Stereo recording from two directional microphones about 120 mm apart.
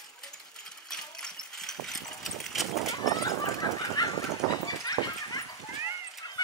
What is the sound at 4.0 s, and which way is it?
Dog, 35° left (ahead or behind).